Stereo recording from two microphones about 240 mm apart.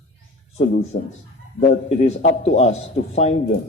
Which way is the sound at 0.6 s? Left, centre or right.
Left.